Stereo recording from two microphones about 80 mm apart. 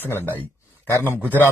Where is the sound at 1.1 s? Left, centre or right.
Left.